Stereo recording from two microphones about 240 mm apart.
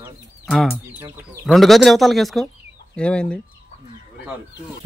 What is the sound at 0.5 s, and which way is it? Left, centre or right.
Speech, centre.